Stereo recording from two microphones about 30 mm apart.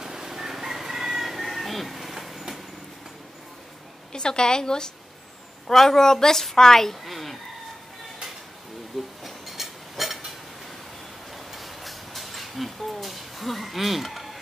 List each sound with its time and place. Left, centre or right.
0.0 s crowing: centre
2.2 s vehicle: centre
4.1 s a woman's voice: left
5.7 s a woman's voice: centre
7.1 s chicken: centre
9.2 s a sound: centre
11.3 s a sound: centre